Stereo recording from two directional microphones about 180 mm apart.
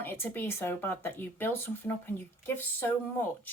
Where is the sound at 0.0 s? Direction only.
10° left (ahead or behind).